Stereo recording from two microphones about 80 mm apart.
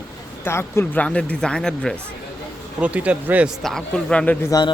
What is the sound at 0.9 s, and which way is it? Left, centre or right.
Speech, centre.